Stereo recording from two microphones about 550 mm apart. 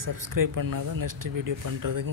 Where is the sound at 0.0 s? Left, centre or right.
Right.